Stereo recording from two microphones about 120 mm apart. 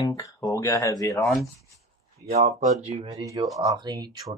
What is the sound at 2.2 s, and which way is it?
Speech, 70° right (ahead or behind).